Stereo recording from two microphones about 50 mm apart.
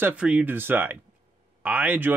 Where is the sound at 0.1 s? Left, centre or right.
Right.